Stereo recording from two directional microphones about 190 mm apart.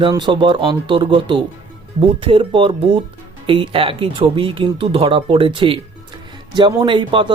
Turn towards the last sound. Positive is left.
turn(degrees=-25)  # may be behind; listen again after turning